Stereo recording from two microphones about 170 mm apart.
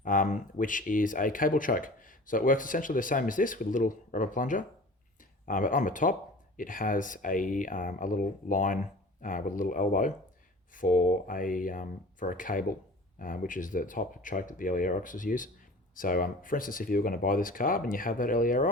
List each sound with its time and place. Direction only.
0.0 s speech: 50° left (ahead or behind)